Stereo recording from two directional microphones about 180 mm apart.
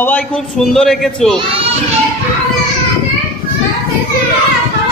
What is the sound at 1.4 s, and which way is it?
Speech, 30° right (ahead or behind).